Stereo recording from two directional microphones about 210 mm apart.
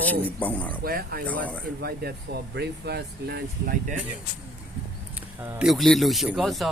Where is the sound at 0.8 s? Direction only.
45° right (ahead or behind).